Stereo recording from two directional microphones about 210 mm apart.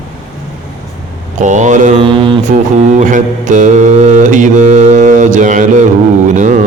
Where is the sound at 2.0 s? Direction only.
25° right (ahead or behind).